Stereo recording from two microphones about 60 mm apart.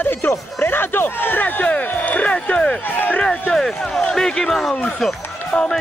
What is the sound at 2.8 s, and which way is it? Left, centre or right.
Speech, left.